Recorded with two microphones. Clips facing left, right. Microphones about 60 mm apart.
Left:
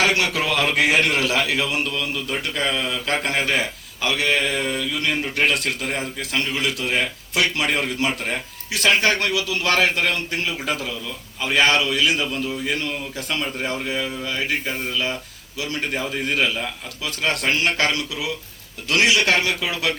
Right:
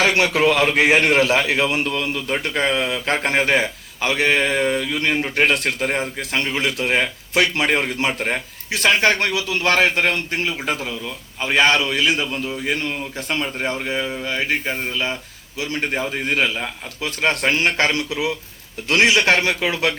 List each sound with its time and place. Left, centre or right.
0.0 s a man's voice: right